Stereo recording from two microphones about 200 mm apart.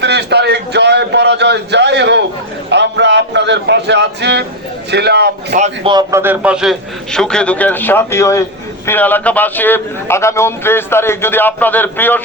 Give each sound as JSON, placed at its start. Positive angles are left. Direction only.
{"t": 0.0, "sound": "a sound", "side_deg": -55}
{"t": 2.6, "sound": "speech", "side_deg": -60}
{"t": 5.5, "sound": "a man's voice", "side_deg": -35}
{"t": 5.9, "sound": "a man's voice", "side_deg": -15}